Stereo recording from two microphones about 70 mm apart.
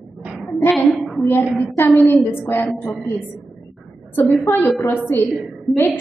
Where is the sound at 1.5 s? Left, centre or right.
Left.